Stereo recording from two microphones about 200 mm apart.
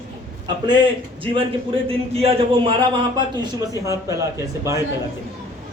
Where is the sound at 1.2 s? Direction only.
25° right (ahead or behind).